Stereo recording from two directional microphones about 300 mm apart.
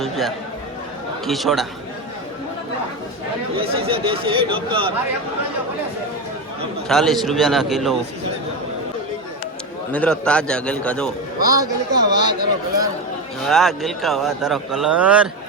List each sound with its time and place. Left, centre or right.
0.0 s speech: centre
3.6 s speech: centre
6.8 s speech: centre
9.9 s speech: centre
11.4 s speech: centre
13.4 s speech: centre